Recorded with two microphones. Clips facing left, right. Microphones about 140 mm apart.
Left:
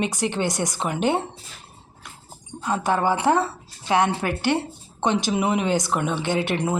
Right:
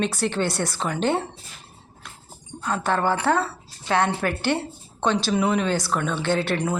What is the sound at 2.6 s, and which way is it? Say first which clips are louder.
Speech: left 1 dB; 15° left (ahead or behind).